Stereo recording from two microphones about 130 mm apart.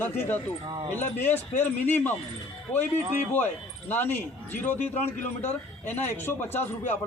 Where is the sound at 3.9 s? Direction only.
15° left (ahead or behind).